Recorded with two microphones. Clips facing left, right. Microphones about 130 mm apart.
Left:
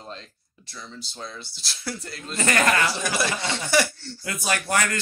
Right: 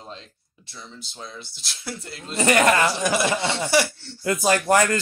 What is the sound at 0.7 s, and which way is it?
Speech, 20° right (ahead or behind).